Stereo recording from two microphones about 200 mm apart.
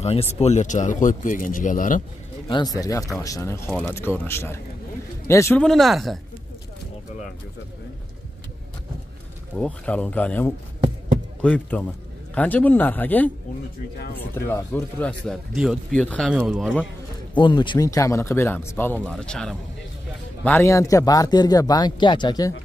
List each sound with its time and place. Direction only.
0.0 s speech: 30° left (ahead or behind)
2.4 s speech: 20° left (ahead or behind)
5.6 s speech: centre (ahead or behind)
9.6 s speech: 5° left (ahead or behind)
17.4 s speech: 25° left (ahead or behind)